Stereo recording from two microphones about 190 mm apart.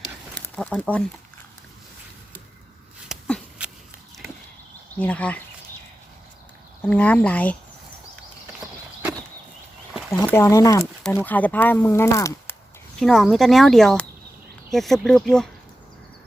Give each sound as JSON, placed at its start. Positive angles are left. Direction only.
{"t": 0.3, "sound": "speech", "side_deg": 5}
{"t": 3.1, "sound": "a sound", "side_deg": 5}
{"t": 4.9, "sound": "speech", "side_deg": 5}
{"t": 6.8, "sound": "speech", "side_deg": 5}
{"t": 10.2, "sound": "speech", "side_deg": 15}
{"t": 13.0, "sound": "speech", "side_deg": 0}